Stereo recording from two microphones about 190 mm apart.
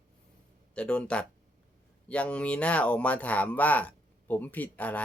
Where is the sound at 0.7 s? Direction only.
5° left (ahead or behind).